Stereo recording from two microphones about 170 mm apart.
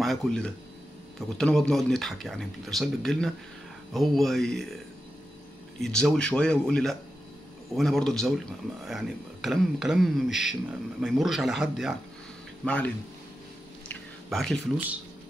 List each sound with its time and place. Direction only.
0.0 s speech: 5° left (ahead or behind)
5.8 s speech: 5° left (ahead or behind)
12.6 s speech: 10° left (ahead or behind)
13.8 s a sound: 5° left (ahead or behind)